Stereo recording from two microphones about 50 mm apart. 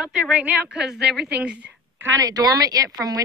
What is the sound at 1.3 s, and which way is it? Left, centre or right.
Speech, right.